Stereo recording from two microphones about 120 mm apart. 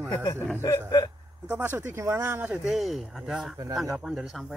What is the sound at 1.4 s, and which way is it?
Speech, 15° right (ahead or behind).